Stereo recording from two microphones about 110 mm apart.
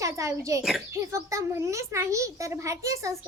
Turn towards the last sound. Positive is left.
turn(degrees=-30)  # may be behind; listen again after turning